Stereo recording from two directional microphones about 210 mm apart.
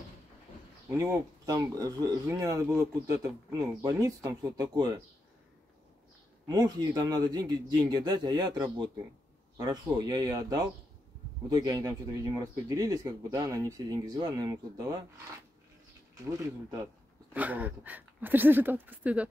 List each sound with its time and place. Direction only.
0.9 s speech: 15° right (ahead or behind)
6.4 s a man's voice: 20° right (ahead or behind)
16.8 s speech: 5° right (ahead or behind)